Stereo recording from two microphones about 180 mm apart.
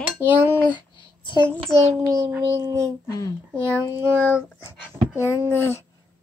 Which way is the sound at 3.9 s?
10° right (ahead or behind).